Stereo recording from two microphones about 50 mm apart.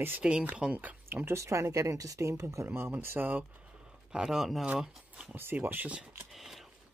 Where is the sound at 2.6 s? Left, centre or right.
Right.